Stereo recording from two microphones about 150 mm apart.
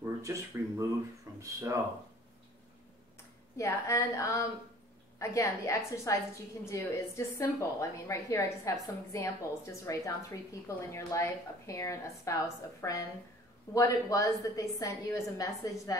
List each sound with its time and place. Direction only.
0.0 s speech: 20° right (ahead or behind)
3.5 s a woman's voice: 20° left (ahead or behind)